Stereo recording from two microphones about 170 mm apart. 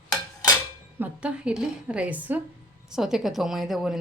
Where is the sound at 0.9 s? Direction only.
10° right (ahead or behind).